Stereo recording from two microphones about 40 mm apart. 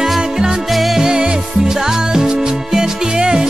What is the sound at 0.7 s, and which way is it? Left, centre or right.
Music, centre.